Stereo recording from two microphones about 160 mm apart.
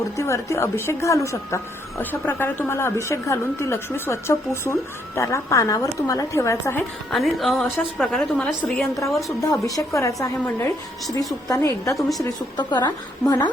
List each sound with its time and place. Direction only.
0.2 s a woman's voice: 20° left (ahead or behind)
7.1 s a woman's voice: centre (ahead or behind)
9.0 s a woman's voice: 20° left (ahead or behind)
11.9 s a woman's voice: centre (ahead or behind)
12.2 s a woman's voice: 25° left (ahead or behind)